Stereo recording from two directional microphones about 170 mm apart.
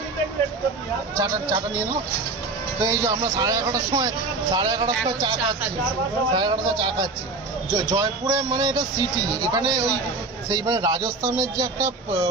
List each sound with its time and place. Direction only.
2.8 s speech: 20° right (ahead or behind)